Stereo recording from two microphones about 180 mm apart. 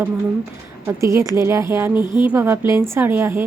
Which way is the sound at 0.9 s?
15° right (ahead or behind).